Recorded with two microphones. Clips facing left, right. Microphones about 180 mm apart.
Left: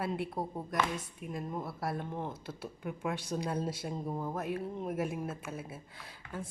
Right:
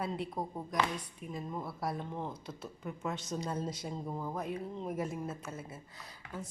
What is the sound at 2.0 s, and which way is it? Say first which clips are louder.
A woman's voice: left 1 dB; 15° left (ahead or behind).